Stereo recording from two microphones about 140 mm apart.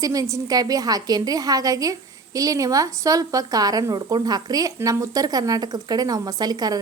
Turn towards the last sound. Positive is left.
turn(degrees=-25)  # may be behind; listen again after turning